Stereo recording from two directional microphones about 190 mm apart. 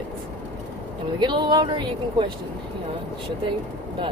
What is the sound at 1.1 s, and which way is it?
Speech, 25° right (ahead or behind).